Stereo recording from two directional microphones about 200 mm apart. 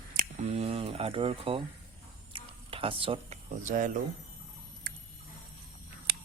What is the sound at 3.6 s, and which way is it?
Speech, 40° right (ahead or behind).